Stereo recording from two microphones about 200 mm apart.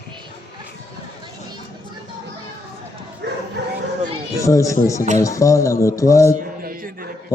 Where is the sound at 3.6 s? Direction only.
60° right (ahead or behind).